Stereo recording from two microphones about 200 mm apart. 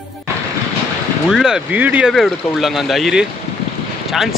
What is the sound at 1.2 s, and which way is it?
Speech, 5° right (ahead or behind).